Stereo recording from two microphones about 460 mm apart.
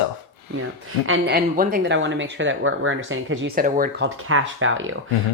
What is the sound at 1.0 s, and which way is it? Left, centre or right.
Speech, right.